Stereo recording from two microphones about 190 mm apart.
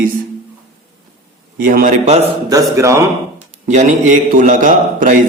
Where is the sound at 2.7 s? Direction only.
15° right (ahead or behind).